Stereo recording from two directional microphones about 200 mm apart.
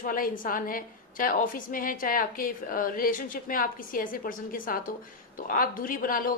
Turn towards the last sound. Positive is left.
turn(degrees=45)  # may be behind; listen again after turning